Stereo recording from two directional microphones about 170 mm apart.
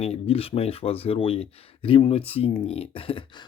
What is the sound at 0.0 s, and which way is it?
Speech, 35° left (ahead or behind).